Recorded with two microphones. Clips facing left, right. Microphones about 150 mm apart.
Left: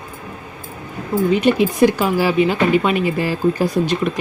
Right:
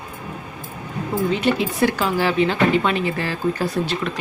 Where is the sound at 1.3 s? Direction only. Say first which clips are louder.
Left 7 dB; 15° left (ahead or behind).